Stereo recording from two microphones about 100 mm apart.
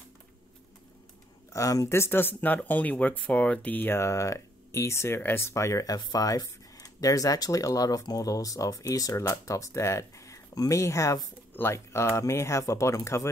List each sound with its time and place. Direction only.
1.5 s speech: 30° left (ahead or behind)